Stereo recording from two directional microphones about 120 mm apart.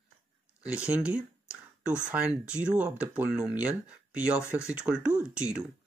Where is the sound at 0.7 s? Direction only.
10° right (ahead or behind).